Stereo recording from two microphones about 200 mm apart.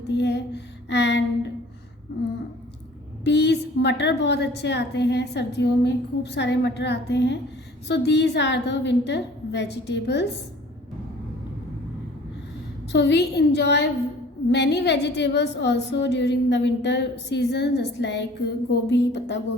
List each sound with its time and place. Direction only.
0.1 s a woman's voice: 60° left (ahead or behind)
3.2 s a woman's voice: 60° left (ahead or behind)
12.9 s a woman's voice: 60° left (ahead or behind)